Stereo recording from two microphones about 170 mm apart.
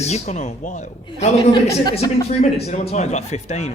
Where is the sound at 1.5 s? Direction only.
25° left (ahead or behind).